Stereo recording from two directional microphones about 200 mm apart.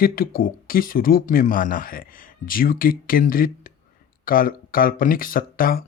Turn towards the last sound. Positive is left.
turn(degrees=45)  # may be behind; listen again after turning